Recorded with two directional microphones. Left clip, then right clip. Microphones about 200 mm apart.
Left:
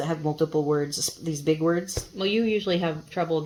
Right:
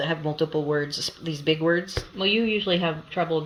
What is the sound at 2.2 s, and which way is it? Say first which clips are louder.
Speech: right 2 dB; 20° left (ahead or behind).